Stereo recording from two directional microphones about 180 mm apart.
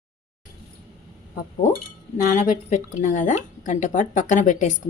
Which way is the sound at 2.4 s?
45° left (ahead or behind).